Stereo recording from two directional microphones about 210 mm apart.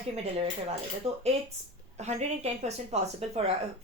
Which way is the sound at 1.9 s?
30° right (ahead or behind).